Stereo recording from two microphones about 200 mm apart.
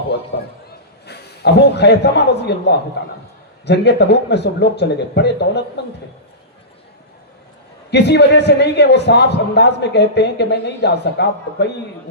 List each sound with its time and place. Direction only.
0.3 s a man's voice: 55° left (ahead or behind)
7.9 s a man's voice: 55° left (ahead or behind)